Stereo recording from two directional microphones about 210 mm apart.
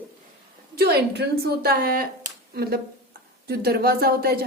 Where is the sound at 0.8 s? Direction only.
50° right (ahead or behind).